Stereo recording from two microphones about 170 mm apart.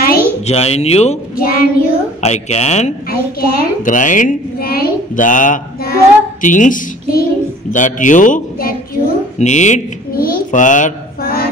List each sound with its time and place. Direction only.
0.0 s a sound: 60° left (ahead or behind)
0.5 s speech: 40° left (ahead or behind)
1.3 s child singing: 60° left (ahead or behind)
2.2 s speech: 40° left (ahead or behind)
3.1 s a child's voice: 55° left (ahead or behind)
9.4 s a woman's voice: 45° left (ahead or behind)
10.2 s a sound: 55° left (ahead or behind)